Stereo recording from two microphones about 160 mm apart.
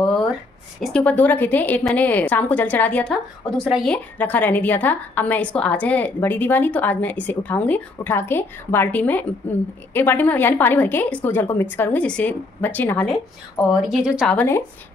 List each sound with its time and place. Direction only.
0.7 s a woman's voice: 5° left (ahead or behind)
13.7 s speech: 5° right (ahead or behind)
14.3 s a woman's voice: 10° left (ahead or behind)